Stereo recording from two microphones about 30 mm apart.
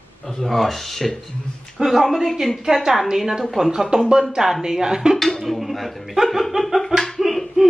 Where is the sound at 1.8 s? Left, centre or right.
Centre.